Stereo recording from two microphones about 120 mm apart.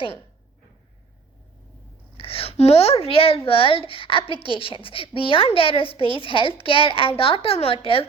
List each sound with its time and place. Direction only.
2.1 s a child's voice: 50° left (ahead or behind)